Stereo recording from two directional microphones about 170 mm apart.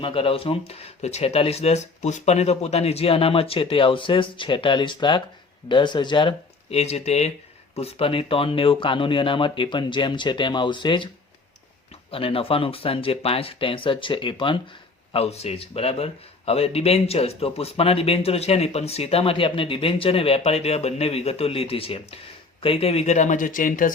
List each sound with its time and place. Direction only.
0.0 s speech: 30° left (ahead or behind)
12.1 s speech: 35° left (ahead or behind); by 23.9 s 50° left (ahead or behind)